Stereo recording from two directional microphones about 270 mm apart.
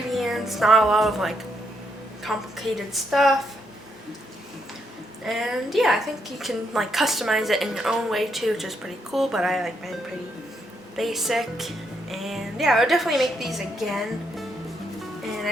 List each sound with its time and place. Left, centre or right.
0.1 s a woman's voice: centre
5.2 s a woman's voice: centre